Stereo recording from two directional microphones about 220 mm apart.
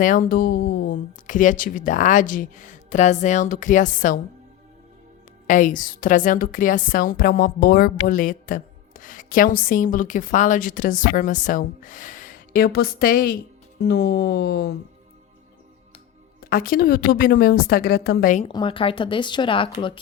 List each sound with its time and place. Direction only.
0.0 s a woman's voice: 40° left (ahead or behind)
5.5 s a woman's voice: 35° left (ahead or behind)
16.5 s a woman's voice: 40° left (ahead or behind)
18.4 s speech: 20° left (ahead or behind)